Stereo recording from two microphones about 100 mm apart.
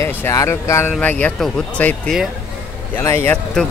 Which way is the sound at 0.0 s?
30° left (ahead or behind).